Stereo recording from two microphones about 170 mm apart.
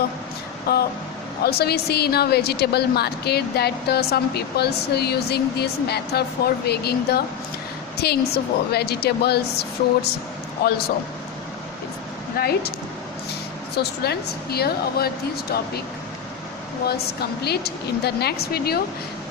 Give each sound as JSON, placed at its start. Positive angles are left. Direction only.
{"t": 0.7, "sound": "a woman's voice", "side_deg": 65}
{"t": 12.4, "sound": "a woman's voice", "side_deg": 65}
{"t": 13.7, "sound": "a woman's voice", "side_deg": 70}
{"t": 16.8, "sound": "a woman's voice", "side_deg": 70}